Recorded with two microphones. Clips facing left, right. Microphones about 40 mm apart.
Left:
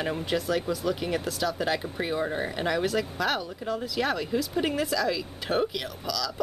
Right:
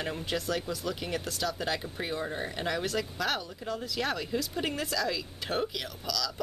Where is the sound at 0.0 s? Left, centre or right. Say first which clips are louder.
Left 5 dB; centre.